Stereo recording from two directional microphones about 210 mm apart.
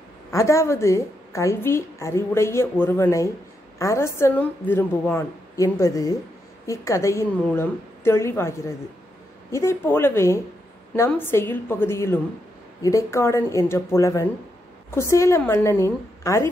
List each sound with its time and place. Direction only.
0.3 s a woman's voice: 15° left (ahead or behind)